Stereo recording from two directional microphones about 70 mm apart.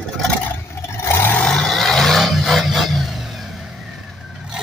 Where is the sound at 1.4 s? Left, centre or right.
Centre.